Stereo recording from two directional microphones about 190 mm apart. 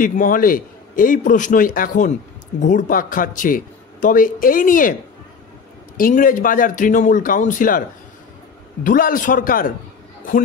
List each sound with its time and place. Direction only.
0.0 s speech: 45° left (ahead or behind)
5.9 s speech: 45° left (ahead or behind)
8.8 s speech: 45° left (ahead or behind)